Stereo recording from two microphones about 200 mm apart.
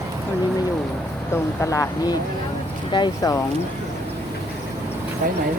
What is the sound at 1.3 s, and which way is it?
Speech, 15° left (ahead or behind).